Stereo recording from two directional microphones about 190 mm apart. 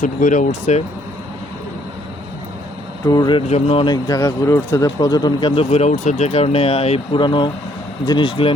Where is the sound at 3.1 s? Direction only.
25° left (ahead or behind).